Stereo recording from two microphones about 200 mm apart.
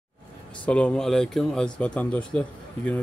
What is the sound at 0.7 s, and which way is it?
Speech, 5° left (ahead or behind).